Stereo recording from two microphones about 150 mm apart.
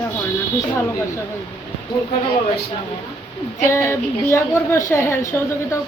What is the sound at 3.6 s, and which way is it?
A woman's voice, 20° left (ahead or behind).